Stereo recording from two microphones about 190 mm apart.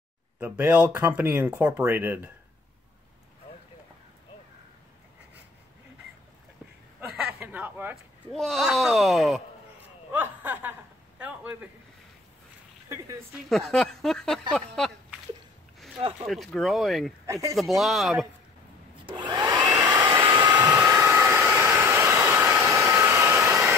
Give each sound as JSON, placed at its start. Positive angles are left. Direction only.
{"t": 0.4, "sound": "speech", "side_deg": -5}
{"t": 7.2, "sound": "a sound", "side_deg": -10}
{"t": 8.3, "sound": "speech", "side_deg": 0}
{"t": 10.1, "sound": "chuckle", "side_deg": -10}
{"t": 13.5, "sound": "speech", "side_deg": 0}
{"t": 16.0, "sound": "speech", "side_deg": -30}
{"t": 16.3, "sound": "speech", "side_deg": 0}
{"t": 17.3, "sound": "speech", "side_deg": -15}
{"t": 17.6, "sound": "speech", "side_deg": 0}
{"t": 19.0, "sound": "hair dryer", "side_deg": -25}